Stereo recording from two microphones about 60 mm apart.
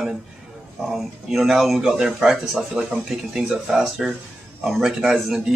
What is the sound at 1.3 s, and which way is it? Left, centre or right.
Speech, centre.